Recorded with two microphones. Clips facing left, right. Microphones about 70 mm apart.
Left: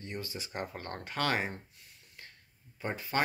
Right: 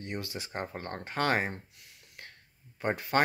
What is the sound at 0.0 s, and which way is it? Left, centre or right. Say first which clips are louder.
Speech: right 3 dB; right.